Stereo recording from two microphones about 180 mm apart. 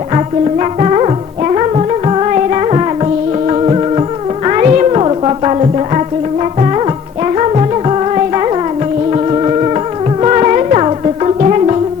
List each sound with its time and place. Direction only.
0.6 s music: 35° right (ahead or behind)
7.3 s music: 35° right (ahead or behind)